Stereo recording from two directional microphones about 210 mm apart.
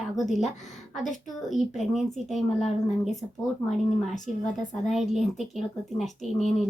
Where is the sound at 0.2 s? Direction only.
Centre (ahead or behind).